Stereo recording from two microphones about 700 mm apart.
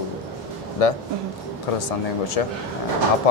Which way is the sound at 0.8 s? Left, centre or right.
Left.